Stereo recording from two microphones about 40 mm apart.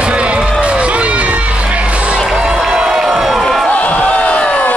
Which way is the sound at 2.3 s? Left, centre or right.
Centre.